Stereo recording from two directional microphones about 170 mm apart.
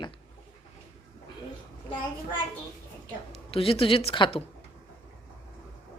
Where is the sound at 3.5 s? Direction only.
35° left (ahead or behind).